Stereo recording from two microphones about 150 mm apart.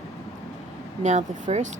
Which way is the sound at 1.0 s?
50° right (ahead or behind).